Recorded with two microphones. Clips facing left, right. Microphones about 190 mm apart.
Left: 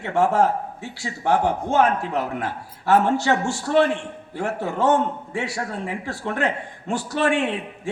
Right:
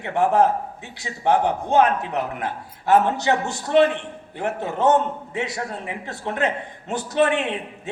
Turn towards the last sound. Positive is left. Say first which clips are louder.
# right 1 dB
turn(degrees=-20)  # may be behind; listen again after turning